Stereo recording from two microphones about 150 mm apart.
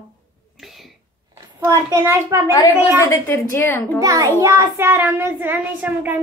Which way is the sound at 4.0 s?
25° right (ahead or behind).